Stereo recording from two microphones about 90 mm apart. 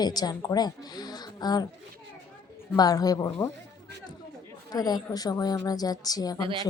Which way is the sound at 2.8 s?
45° left (ahead or behind).